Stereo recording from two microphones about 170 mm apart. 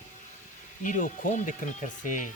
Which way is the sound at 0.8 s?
50° left (ahead or behind).